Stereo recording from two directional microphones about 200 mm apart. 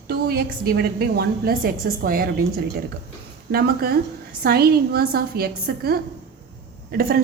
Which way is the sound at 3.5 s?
50° right (ahead or behind).